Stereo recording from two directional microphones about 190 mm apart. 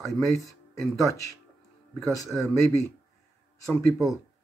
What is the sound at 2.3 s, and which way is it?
Speech, 5° left (ahead or behind).